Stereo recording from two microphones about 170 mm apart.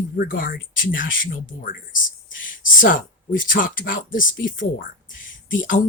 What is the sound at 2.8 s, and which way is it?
Speech, 55° left (ahead or behind).